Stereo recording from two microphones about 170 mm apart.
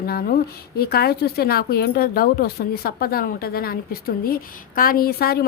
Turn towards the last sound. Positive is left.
turn(degrees=65)  # may be behind; listen again after turning